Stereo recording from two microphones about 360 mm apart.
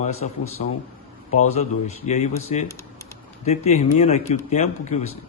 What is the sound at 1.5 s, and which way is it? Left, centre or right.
Speech, centre.